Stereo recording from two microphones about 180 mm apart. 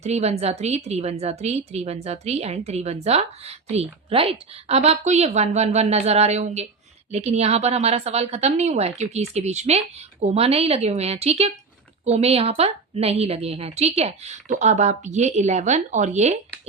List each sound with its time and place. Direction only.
0.0 s a woman's voice: 35° right (ahead or behind)